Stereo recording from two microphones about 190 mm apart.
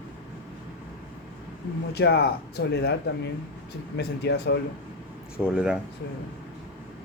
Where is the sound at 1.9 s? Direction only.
60° left (ahead or behind).